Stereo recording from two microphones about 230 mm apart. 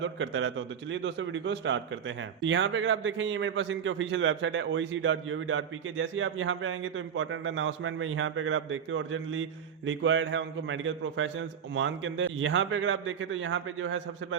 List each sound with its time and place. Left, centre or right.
0.0 s a man's voice: right